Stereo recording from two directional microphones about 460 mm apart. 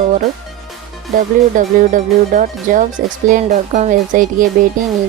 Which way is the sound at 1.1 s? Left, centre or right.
Centre.